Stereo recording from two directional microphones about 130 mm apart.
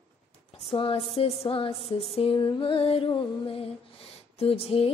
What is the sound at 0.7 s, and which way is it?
Female singing, 45° left (ahead or behind).